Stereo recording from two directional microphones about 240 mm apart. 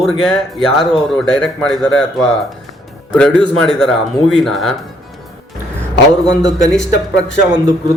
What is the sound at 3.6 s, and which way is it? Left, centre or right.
Speech, centre.